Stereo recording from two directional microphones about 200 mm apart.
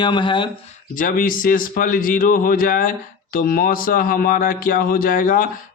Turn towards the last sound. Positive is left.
turn(degrees=45)  # may be behind; listen again after turning